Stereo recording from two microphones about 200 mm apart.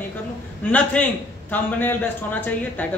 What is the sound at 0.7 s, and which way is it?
Speech, 10° left (ahead or behind).